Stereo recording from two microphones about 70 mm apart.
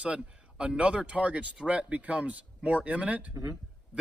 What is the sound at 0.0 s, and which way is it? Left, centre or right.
Speech, centre.